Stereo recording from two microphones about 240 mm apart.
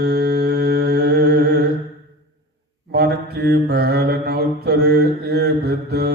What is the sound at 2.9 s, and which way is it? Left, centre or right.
Mantra, right.